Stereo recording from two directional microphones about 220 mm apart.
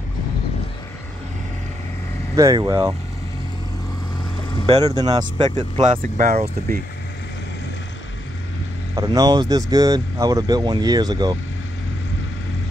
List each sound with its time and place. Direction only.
2.3 s speech: 15° right (ahead or behind)
4.8 s speech: 15° right (ahead or behind)
5.8 s speech: 35° right (ahead or behind)
8.9 s speech: 15° right (ahead or behind)